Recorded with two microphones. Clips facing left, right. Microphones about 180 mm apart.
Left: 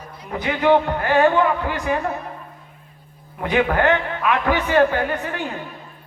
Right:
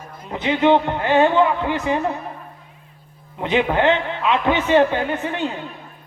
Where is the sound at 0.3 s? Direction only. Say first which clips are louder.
Right 1 dB; 20° right (ahead or behind).